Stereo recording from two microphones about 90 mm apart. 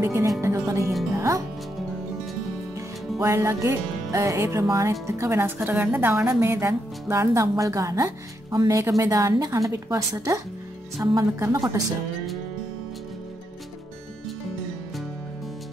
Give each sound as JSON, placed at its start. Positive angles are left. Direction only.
{"t": 0.0, "sound": "speech", "side_deg": -35}
{"t": 1.1, "sound": "music", "side_deg": -35}
{"t": 3.2, "sound": "speech", "side_deg": -30}
{"t": 5.6, "sound": "speech", "side_deg": -20}